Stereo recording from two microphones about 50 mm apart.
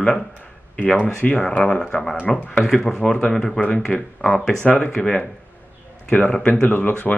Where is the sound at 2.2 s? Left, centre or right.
Left.